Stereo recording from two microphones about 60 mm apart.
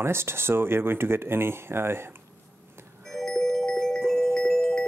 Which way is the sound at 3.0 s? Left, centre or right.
Centre.